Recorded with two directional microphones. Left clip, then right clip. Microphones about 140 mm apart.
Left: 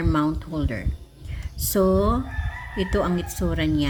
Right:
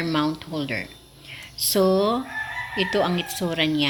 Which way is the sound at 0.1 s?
50° left (ahead or behind).